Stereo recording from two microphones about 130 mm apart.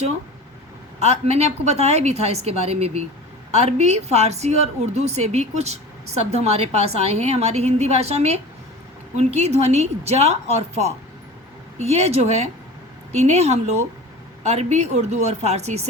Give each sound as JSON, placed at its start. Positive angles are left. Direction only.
{"t": 0.9, "sound": "a woman's voice", "side_deg": -55}